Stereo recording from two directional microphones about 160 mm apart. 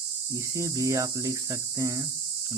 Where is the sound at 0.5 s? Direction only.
20° right (ahead or behind).